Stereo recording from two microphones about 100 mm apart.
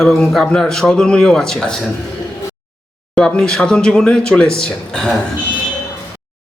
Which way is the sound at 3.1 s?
5° left (ahead or behind).